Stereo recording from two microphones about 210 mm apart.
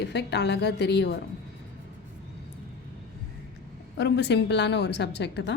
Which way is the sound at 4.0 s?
55° left (ahead or behind).